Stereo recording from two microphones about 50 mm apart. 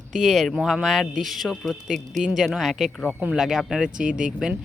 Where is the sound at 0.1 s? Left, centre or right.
Centre.